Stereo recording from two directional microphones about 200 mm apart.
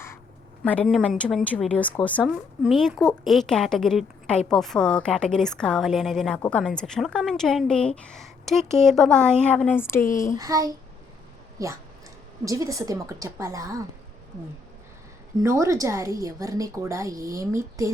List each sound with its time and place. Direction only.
0.6 s a woman's voice: 5° left (ahead or behind)
10.0 s a child's voice: 40° left (ahead or behind)
10.3 s a woman's voice: 20° right (ahead or behind)
15.4 s a woman's voice: 15° right (ahead or behind)